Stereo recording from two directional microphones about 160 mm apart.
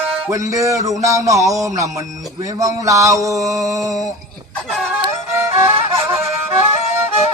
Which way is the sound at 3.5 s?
Centre (ahead or behind).